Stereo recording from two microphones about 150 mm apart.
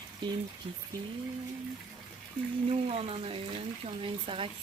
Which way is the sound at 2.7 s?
40° right (ahead or behind).